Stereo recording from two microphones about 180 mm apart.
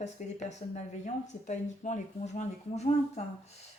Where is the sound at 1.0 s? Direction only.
40° left (ahead or behind).